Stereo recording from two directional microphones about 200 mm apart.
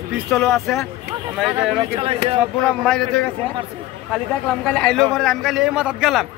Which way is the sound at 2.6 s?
5° left (ahead or behind).